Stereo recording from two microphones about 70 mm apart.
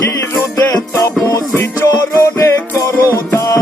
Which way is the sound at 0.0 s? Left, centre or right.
Left.